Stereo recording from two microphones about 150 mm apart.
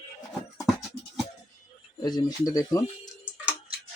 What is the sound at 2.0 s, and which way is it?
Speech, 25° left (ahead or behind).